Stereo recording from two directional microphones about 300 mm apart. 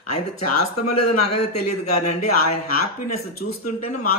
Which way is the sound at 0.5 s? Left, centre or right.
Left.